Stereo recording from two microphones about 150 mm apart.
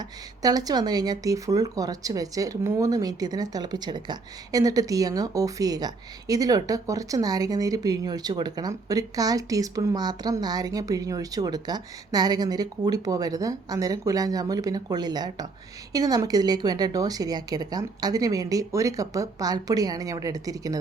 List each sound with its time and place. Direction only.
0.0 s speech: 25° right (ahead or behind)